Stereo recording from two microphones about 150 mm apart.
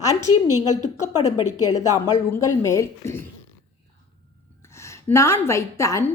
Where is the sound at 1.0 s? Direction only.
25° left (ahead or behind).